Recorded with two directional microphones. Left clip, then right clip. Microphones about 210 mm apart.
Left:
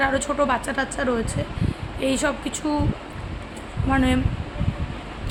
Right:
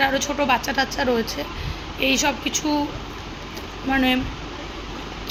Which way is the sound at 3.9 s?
20° left (ahead or behind).